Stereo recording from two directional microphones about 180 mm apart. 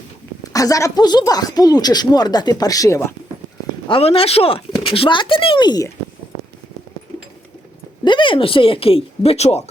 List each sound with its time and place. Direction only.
0.4 s speech: 20° left (ahead or behind)
3.8 s speech: 30° left (ahead or behind)
8.0 s speech: 25° left (ahead or behind)